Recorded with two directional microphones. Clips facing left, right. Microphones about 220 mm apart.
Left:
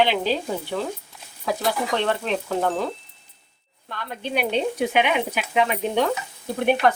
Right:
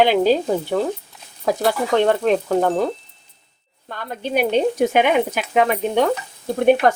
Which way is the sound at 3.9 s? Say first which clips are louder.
Right 5 dB; 45° right (ahead or behind).